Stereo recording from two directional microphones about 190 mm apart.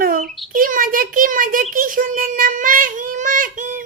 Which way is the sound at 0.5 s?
45° right (ahead or behind).